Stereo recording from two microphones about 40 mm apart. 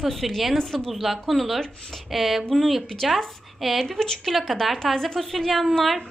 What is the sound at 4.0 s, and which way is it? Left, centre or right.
A woman's voice, centre.